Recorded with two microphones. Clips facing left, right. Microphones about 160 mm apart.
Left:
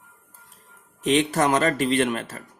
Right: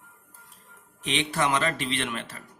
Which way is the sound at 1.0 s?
45° left (ahead or behind).